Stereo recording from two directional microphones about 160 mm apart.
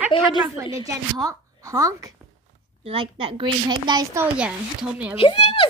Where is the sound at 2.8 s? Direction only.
35° right (ahead or behind).